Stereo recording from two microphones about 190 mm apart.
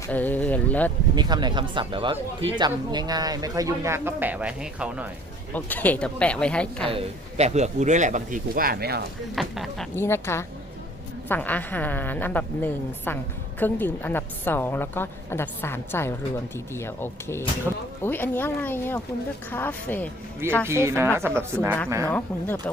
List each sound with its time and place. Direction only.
0.1 s speech: 10° left (ahead or behind)
1.1 s speech: 20° right (ahead or behind); by 5.0 s 5° right (ahead or behind)
5.5 s a woman's voice: 10° left (ahead or behind)
6.9 s speech: 35° right (ahead or behind); by 9.0 s 55° right (ahead or behind)
9.3 s speech: centre (ahead or behind)
9.9 s a woman's voice: 15° left (ahead or behind)
20.7 s speech: 15° right (ahead or behind)
22.0 s a woman's voice: 10° left (ahead or behind)